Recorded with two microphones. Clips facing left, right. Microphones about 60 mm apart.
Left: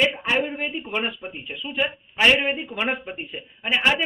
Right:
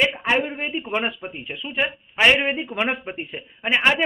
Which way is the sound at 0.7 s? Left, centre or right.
Right.